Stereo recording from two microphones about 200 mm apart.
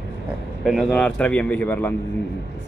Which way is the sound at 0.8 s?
5° left (ahead or behind).